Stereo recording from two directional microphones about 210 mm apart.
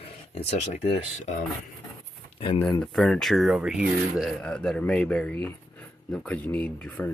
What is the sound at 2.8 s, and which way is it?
Speech, centre (ahead or behind).